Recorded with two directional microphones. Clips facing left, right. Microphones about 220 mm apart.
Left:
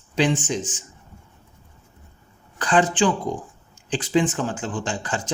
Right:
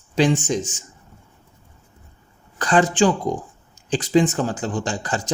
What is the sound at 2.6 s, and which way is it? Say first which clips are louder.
Speech: right 2 dB; 40° right (ahead or behind).